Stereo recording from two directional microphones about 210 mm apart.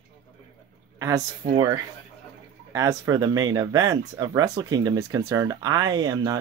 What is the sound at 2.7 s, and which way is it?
Speech, 15° right (ahead or behind).